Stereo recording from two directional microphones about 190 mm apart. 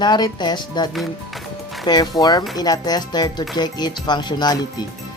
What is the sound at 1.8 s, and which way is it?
Speech, 20° left (ahead or behind).